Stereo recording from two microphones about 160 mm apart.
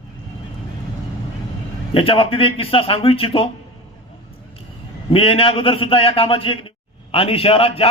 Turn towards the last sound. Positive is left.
turn(degrees=35)  # may be behind; listen again after turning